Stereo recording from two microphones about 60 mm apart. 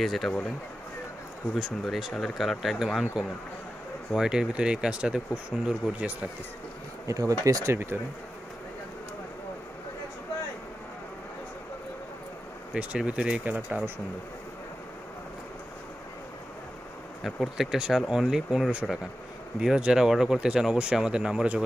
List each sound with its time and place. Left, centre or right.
0.0 s speech: centre
1.6 s speech: centre
7.1 s speech: right
7.7 s speech: right
12.7 s speech: right
17.2 s speech: centre